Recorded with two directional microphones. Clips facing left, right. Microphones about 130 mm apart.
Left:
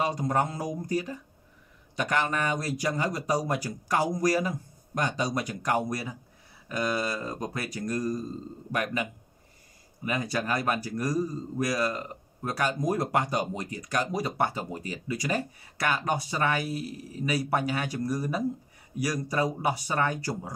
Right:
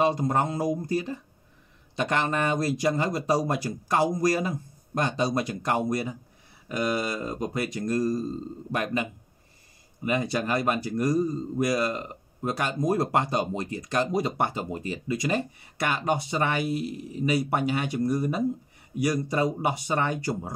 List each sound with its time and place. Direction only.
0.0 s speech: 25° right (ahead or behind)
10.0 s speech: 25° right (ahead or behind)